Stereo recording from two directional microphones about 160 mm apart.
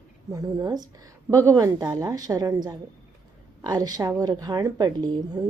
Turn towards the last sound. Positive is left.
turn(degrees=-25)  # may be behind; listen again after turning